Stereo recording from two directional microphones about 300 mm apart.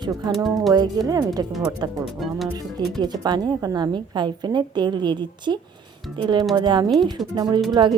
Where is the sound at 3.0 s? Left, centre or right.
Centre.